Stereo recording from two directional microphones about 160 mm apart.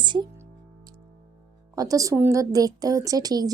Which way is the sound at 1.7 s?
20° right (ahead or behind).